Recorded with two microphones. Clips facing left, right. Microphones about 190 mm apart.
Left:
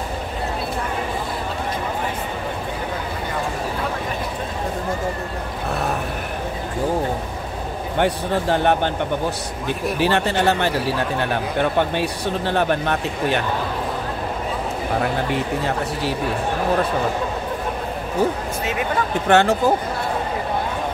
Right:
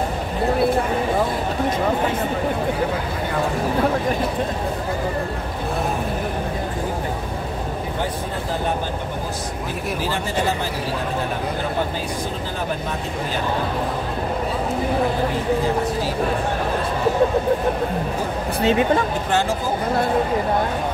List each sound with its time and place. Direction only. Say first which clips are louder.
8.0 s speech: left 10 dB; 70° left (ahead or behind)
9.9 s speech: left 5 dB; 70° left (ahead or behind)
12.4 s speech: left 6 dB; 70° left (ahead or behind)
18.6 s speech: right 9 dB; 30° right (ahead or behind)
19.2 s speech: left 5 dB; 65° left (ahead or behind)